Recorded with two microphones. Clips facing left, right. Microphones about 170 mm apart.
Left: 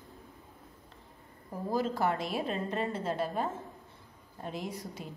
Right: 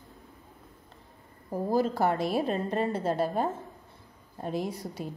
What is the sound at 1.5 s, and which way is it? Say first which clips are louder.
A woman's voice: right 5 dB; 35° right (ahead or behind).